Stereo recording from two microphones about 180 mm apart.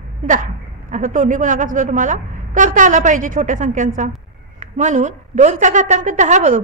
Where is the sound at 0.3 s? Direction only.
45° right (ahead or behind).